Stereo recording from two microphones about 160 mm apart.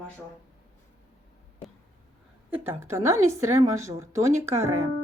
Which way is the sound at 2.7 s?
15° right (ahead or behind).